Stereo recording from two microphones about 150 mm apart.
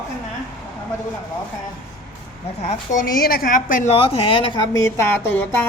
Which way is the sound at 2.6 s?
50° left (ahead or behind).